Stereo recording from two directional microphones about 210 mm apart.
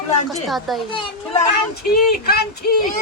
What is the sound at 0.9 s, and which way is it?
Speech, 30° left (ahead or behind).